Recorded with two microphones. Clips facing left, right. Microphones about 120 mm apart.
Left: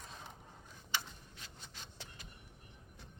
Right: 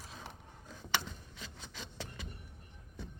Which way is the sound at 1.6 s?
90° right.